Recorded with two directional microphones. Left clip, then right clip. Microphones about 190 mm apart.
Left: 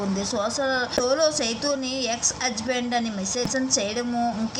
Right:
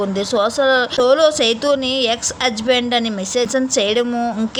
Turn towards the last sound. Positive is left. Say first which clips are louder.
# right 8 dB
turn(degrees=-45)  # may be behind; listen again after turning